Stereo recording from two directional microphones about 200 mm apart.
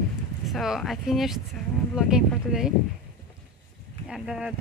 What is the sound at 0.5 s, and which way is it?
Speech, centre (ahead or behind).